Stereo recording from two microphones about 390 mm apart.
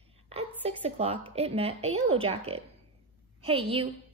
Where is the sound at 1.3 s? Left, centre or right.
Centre.